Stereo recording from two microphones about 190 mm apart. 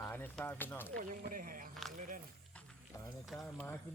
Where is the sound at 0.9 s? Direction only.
45° right (ahead or behind).